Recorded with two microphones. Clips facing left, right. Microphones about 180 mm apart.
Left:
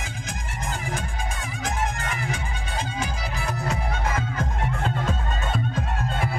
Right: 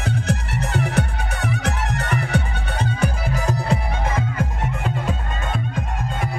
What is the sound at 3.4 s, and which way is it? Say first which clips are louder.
Music: right 5 dB; 40° right (ahead or behind).